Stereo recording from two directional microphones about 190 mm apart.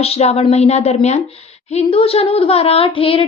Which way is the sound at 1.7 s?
30° left (ahead or behind).